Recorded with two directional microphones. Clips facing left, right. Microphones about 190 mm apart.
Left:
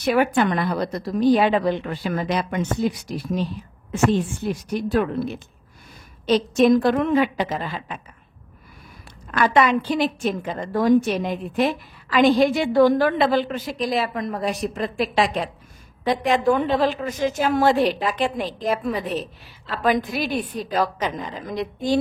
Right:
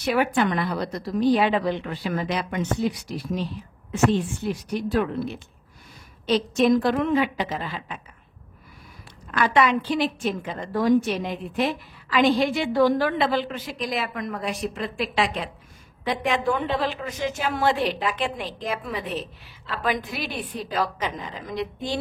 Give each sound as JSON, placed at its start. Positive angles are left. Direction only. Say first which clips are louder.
{"t": 0.0, "sound": "a woman's voice", "louder": "left 3 dB", "side_deg": 45}
{"t": 4.5, "sound": "a woman's voice", "louder": "left 2 dB", "side_deg": 50}
{"t": 9.3, "sound": "a woman's voice", "louder": "left 2 dB", "side_deg": 45}